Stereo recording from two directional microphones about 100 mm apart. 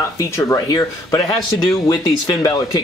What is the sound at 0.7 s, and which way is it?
A man's voice, 45° left (ahead or behind).